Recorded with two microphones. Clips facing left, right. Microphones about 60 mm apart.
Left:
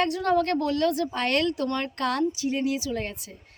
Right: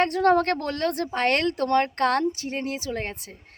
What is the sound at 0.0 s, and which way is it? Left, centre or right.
Speech, right.